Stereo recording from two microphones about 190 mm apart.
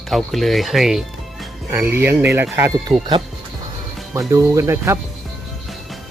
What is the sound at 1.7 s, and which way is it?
Speech, 10° right (ahead or behind).